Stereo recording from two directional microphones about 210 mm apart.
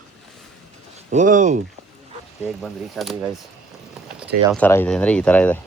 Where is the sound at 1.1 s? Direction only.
35° right (ahead or behind).